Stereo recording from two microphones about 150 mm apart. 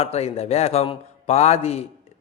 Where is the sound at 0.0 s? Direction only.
45° left (ahead or behind).